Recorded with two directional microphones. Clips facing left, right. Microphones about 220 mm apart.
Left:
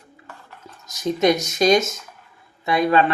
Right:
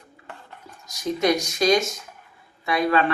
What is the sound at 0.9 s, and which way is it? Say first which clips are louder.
Speech: left 3 dB; 20° left (ahead or behind).